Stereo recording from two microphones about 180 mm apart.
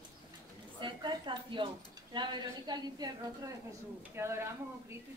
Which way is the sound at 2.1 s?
25° right (ahead or behind).